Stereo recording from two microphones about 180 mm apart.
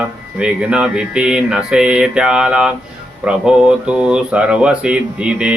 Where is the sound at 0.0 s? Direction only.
5° right (ahead or behind).